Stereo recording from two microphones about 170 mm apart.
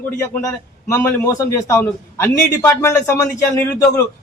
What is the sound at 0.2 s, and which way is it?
A man's voice, 15° left (ahead or behind).